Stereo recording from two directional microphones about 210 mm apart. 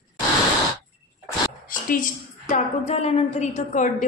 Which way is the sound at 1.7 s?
40° left (ahead or behind).